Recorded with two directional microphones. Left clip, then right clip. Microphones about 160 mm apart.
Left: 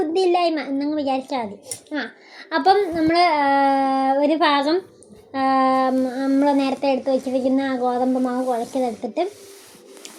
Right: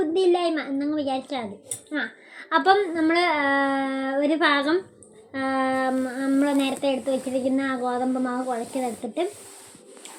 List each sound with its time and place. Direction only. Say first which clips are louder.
0.1 s speech: left 4 dB; 25° left (ahead or behind)
2.5 s speech: left 2 dB; 20° left (ahead or behind)